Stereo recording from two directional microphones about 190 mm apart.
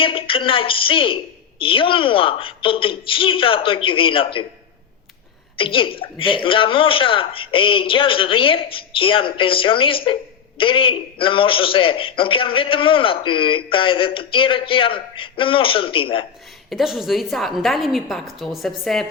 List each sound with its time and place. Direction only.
0.0 s a man's voice: 30° left (ahead or behind)
5.5 s a man's voice: 25° left (ahead or behind)
16.6 s a woman's voice: centre (ahead or behind)